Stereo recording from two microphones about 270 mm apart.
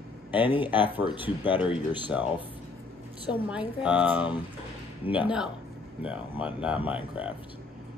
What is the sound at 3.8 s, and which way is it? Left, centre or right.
Speech, centre.